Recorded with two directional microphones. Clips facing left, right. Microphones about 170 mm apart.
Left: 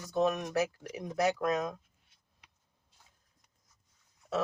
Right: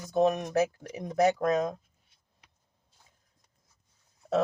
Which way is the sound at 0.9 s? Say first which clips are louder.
Right 5 dB; 25° right (ahead or behind).